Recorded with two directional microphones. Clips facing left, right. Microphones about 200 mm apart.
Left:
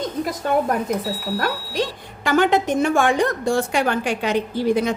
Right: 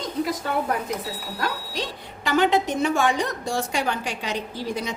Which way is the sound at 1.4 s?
50° left (ahead or behind).